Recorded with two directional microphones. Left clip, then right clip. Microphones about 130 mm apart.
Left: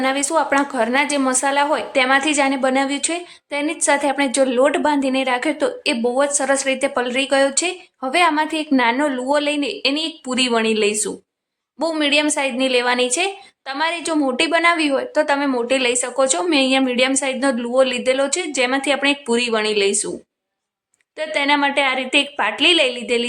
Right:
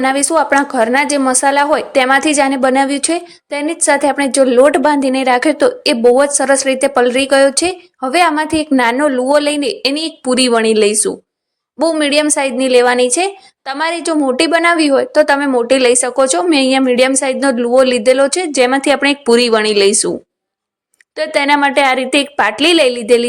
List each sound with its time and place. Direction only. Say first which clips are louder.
0.0 s a woman's voice: right 6 dB; 40° right (ahead or behind)
9.0 s a woman's voice: right 7 dB; 30° right (ahead or behind); by 20.1 s 55° right (ahead or behind)
21.2 s a woman's voice: right 6 dB; 50° right (ahead or behind)